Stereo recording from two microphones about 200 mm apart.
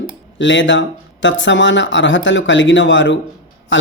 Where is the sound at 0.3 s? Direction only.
65° left (ahead or behind).